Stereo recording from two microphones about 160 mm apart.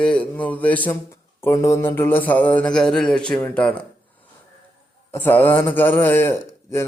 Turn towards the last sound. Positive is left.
turn(degrees=15)  # may be behind; listen again after turning